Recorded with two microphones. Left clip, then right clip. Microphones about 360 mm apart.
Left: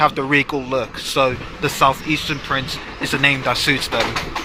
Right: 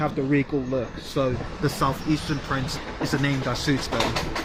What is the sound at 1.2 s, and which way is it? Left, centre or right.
Speech, centre.